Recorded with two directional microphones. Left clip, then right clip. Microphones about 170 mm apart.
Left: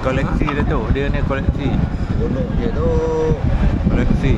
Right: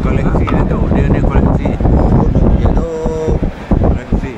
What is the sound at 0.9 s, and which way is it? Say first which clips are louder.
Speech: right 5 dB; 20° left (ahead or behind).